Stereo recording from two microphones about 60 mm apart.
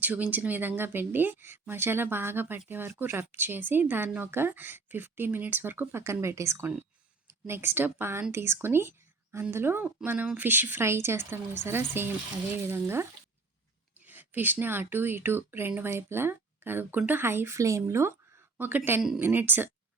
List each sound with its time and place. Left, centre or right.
0.0 s speech: right
6.2 s speech: right
10.8 s speech: right
14.0 s speech: right
17.6 s speech: right
18.5 s speech: right